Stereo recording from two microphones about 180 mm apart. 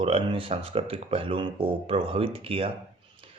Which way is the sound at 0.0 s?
30° right (ahead or behind).